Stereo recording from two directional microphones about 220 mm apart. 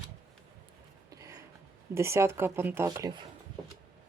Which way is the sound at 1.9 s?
10° right (ahead or behind).